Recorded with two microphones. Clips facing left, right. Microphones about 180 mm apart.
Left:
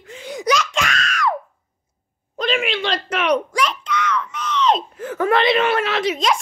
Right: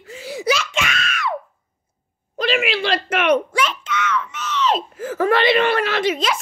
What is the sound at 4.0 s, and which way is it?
Screaming, 35° left (ahead or behind).